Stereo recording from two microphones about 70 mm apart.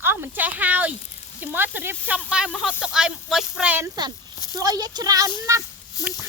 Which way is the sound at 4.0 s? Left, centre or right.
Right.